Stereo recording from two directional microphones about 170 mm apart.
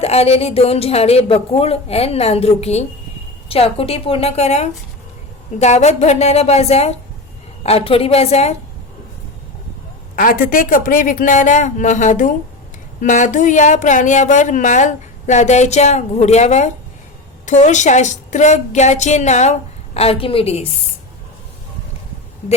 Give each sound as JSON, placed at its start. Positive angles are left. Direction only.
{"t": 0.0, "sound": "a woman's voice", "side_deg": 35}
{"t": 10.2, "sound": "speech", "side_deg": 55}